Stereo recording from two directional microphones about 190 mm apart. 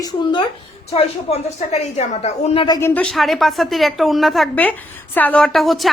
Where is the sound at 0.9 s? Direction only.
35° left (ahead or behind).